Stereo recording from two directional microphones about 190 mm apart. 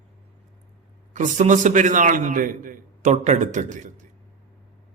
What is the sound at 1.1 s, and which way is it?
A man's voice, 40° right (ahead or behind).